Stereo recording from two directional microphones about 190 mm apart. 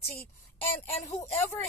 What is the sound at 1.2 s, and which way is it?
Speech, 10° left (ahead or behind).